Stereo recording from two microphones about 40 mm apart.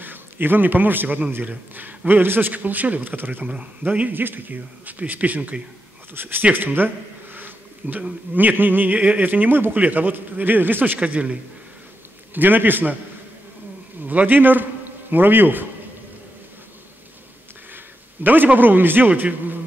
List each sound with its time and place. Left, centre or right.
0.0 s a man's voice: right
2.5 s speech: right
3.8 s a man's voice: right
4.1 s speech: right
6.1 s speech: right
9.8 s speech: right
11.0 s a man's voice: right
12.4 s speech: right
14.0 s a man's voice: right
18.2 s speech: right